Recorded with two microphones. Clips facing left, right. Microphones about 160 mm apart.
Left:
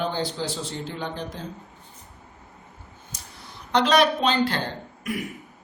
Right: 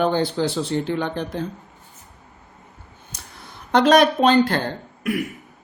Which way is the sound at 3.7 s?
50° right (ahead or behind).